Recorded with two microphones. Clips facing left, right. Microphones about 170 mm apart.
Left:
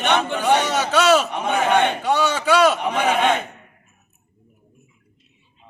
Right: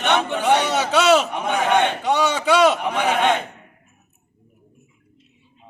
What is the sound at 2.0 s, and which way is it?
Speech, 20° right (ahead or behind).